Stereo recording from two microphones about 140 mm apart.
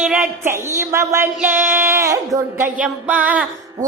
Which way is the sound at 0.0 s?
5° right (ahead or behind).